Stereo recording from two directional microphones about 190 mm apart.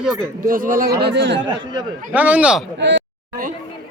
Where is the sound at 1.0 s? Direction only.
65° right (ahead or behind).